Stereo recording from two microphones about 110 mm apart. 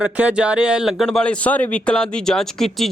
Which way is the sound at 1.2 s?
15° left (ahead or behind).